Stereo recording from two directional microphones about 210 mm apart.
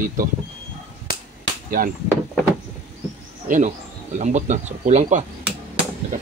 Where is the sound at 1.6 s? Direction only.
40° right (ahead or behind).